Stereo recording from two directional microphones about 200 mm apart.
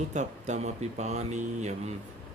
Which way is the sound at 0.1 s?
35° right (ahead or behind).